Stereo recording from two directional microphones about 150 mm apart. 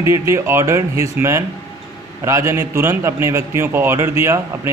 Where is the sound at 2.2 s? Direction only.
20° right (ahead or behind).